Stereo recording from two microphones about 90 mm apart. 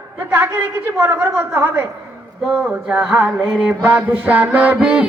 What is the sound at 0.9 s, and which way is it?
Speech, 30° right (ahead or behind).